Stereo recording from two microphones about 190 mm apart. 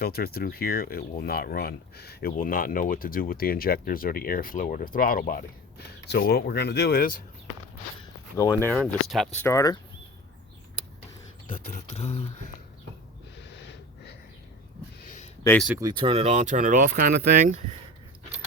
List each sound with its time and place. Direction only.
0.0 s speech: 55° left (ahead or behind)
6.1 s speech: 60° left (ahead or behind)
8.4 s speech: 10° left (ahead or behind)
8.9 s speech: centre (ahead or behind)
9.5 s speech: 15° left (ahead or behind)
11.7 s speech: 35° left (ahead or behind)
15.5 s speech: 15° left (ahead or behind)
15.8 s speech: 25° right (ahead or behind); by 17.6 s 45° right (ahead or behind)